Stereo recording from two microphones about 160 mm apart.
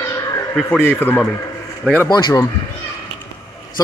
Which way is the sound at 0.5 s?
10° left (ahead or behind).